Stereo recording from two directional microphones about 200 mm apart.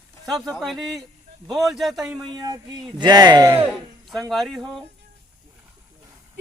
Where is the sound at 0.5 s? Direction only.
Centre (ahead or behind).